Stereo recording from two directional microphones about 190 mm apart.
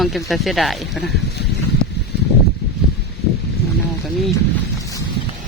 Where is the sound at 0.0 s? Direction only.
Centre (ahead or behind).